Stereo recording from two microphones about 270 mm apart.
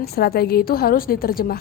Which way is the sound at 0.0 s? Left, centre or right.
Left.